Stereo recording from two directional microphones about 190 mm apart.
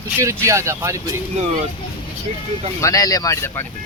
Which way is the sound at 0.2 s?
15° right (ahead or behind).